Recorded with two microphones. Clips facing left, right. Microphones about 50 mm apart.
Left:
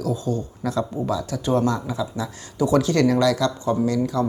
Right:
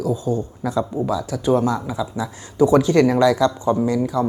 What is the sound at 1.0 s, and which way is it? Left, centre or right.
Speech, centre.